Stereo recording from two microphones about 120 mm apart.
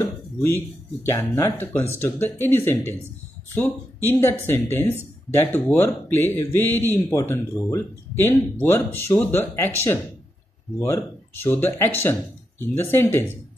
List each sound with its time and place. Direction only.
0.0 s a man's voice: 20° left (ahead or behind)